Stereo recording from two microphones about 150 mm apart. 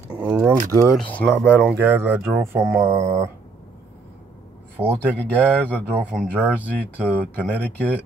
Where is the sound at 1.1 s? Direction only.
10° left (ahead or behind).